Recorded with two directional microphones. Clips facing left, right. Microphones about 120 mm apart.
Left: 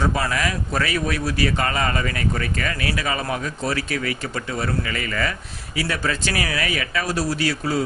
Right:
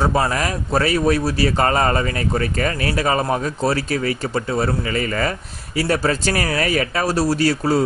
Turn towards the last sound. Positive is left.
turn(degrees=-40)  # may be behind; listen again after turning